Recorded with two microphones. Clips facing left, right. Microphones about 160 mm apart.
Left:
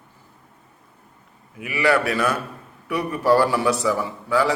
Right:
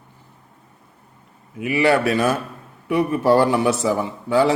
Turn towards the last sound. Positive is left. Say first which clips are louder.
# right 3 dB
turn(degrees=-25)  # may be behind; listen again after turning